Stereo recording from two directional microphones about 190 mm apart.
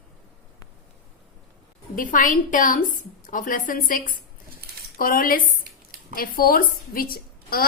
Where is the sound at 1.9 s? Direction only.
45° left (ahead or behind).